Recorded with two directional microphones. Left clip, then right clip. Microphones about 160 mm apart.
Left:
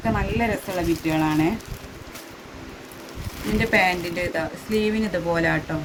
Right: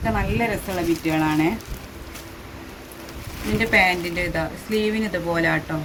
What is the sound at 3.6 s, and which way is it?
Speech, 30° left (ahead or behind).